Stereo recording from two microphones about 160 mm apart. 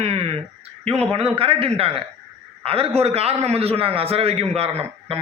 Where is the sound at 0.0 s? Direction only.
40° right (ahead or behind).